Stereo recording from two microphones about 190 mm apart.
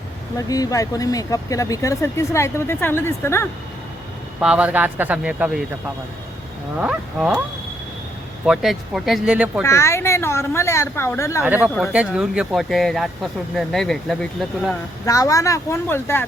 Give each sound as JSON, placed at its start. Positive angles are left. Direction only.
{"t": 0.3, "sound": "speech", "side_deg": 20}
{"t": 4.4, "sound": "speech", "side_deg": -5}
{"t": 6.7, "sound": "speech", "side_deg": -5}
{"t": 8.4, "sound": "speech", "side_deg": 0}
{"t": 9.6, "sound": "speech", "side_deg": 15}
{"t": 11.4, "sound": "speech", "side_deg": -10}
{"t": 15.0, "sound": "speech", "side_deg": 15}